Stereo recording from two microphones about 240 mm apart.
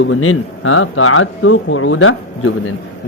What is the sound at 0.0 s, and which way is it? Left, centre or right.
Speech, left.